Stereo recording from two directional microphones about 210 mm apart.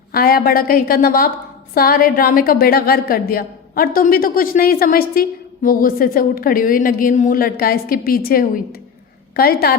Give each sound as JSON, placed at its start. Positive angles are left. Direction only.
{"t": 0.1, "sound": "a woman's voice", "side_deg": 45}